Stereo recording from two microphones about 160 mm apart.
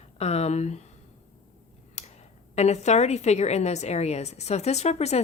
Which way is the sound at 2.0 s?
45° left (ahead or behind).